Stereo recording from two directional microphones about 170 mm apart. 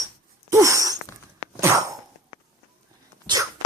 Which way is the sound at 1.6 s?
15° right (ahead or behind).